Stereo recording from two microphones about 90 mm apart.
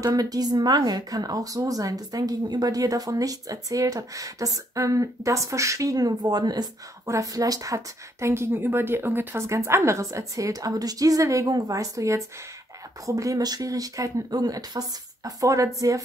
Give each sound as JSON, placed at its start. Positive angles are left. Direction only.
{"t": 0.0, "sound": "speech", "side_deg": -45}
{"t": 7.1, "sound": "a woman's voice", "side_deg": -40}